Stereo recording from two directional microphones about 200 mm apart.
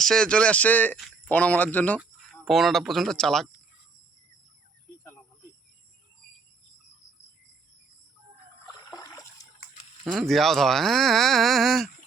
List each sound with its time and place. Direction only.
0.0 s speech: 5° left (ahead or behind)
8.6 s water: 15° left (ahead or behind)
10.1 s speech: centre (ahead or behind)